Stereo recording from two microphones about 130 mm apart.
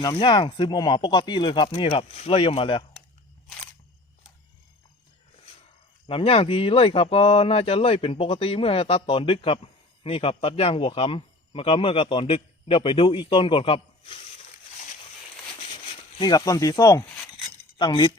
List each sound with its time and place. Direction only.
0.0 s speech: 35° left (ahead or behind)
6.1 s speech: 45° left (ahead or behind)
15.6 s a sound: 45° left (ahead or behind); by 17.0 s 25° left (ahead or behind)
17.7 s speech: 35° left (ahead or behind)